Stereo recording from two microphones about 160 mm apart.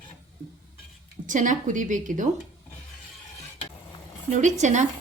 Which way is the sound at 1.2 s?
50° right (ahead or behind).